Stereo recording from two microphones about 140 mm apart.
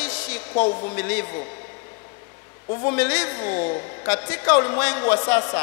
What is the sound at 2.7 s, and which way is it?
A woman's voice, 20° left (ahead or behind).